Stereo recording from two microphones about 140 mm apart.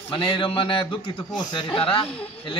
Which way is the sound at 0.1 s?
35° left (ahead or behind).